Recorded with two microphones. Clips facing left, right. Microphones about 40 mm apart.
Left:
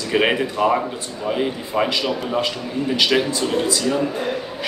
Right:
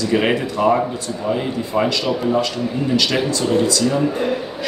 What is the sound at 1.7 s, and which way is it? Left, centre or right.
Speech, centre.